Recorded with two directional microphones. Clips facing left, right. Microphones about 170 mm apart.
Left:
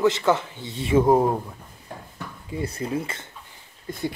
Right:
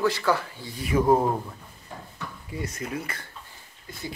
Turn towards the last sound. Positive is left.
turn(degrees=50)  # may be behind; listen again after turning